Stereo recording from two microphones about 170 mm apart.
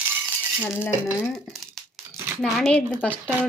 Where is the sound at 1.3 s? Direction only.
Centre (ahead or behind).